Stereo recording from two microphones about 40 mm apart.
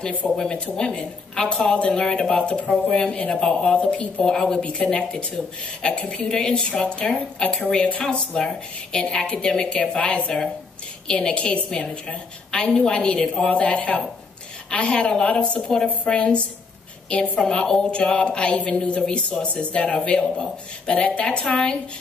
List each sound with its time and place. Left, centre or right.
0.2 s speech: left
0.7 s a woman's voice: left
6.3 s a woman's voice: centre
12.4 s a sound: left
12.7 s a woman's voice: centre